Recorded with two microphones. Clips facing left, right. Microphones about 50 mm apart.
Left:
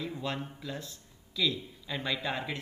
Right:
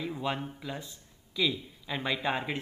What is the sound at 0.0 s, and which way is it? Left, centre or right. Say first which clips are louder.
Speech: right 3 dB; centre.